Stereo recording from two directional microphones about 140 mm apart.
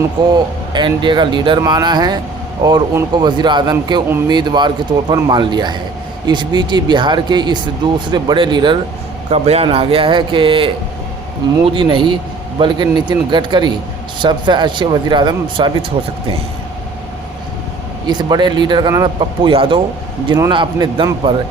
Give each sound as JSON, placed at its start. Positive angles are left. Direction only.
{"t": 0.2, "sound": "speech", "side_deg": -35}
{"t": 9.3, "sound": "speech", "side_deg": -45}
{"t": 18.0, "sound": "speech", "side_deg": -30}